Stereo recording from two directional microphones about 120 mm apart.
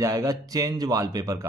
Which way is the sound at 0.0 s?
30° right (ahead or behind).